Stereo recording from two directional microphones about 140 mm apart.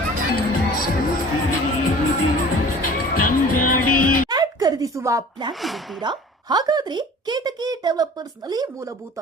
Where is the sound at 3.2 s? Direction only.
80° left.